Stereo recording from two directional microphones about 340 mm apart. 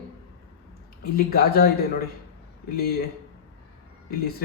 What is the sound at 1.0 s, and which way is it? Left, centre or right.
Speech, left.